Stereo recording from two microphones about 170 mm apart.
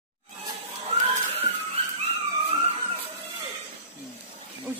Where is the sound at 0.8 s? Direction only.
40° right (ahead or behind).